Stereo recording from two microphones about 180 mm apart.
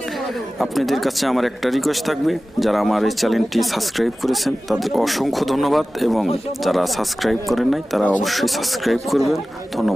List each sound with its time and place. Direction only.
0.6 s speech: centre (ahead or behind)